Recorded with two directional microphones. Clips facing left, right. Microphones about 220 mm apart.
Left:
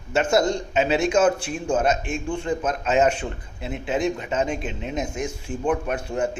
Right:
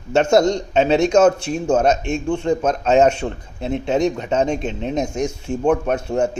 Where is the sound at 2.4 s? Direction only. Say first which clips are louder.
Right 7 dB; 40° right (ahead or behind).